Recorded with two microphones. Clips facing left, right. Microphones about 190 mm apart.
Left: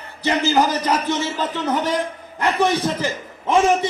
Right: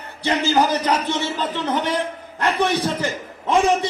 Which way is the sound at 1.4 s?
10° left (ahead or behind).